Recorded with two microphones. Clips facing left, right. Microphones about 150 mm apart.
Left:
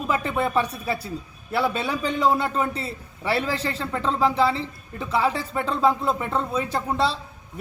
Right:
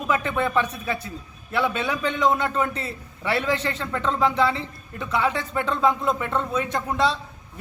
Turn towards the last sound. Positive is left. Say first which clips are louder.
# right 1 dB
turn(degrees=30)  # may be behind; listen again after turning